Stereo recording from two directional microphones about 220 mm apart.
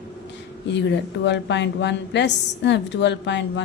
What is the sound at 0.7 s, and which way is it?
A woman's voice, 50° left (ahead or behind).